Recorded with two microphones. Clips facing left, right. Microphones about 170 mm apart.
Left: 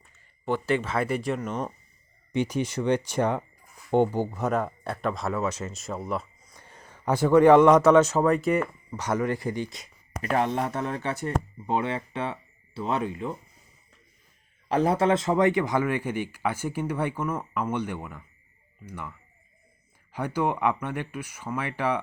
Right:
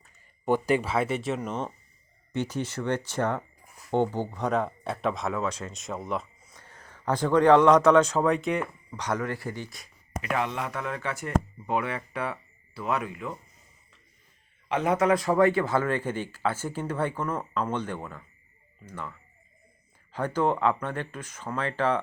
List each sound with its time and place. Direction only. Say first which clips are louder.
0.4 s speech: right 2 dB; 15° right (ahead or behind)
2.3 s speech: left 4 dB; 15° left (ahead or behind)
6.5 s speech: left 1 dB; 15° left (ahead or behind)
10.2 s speech: left 4 dB; 40° left (ahead or behind)
14.7 s speech: left 1 dB; 35° left (ahead or behind); by 19.1 s 15° left (ahead or behind)
20.1 s speech: right 1 dB; 15° left (ahead or behind)